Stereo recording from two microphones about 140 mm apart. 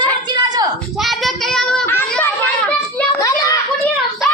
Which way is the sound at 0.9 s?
Centre (ahead or behind).